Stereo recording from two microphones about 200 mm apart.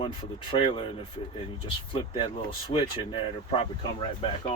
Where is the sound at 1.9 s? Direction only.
25° left (ahead or behind).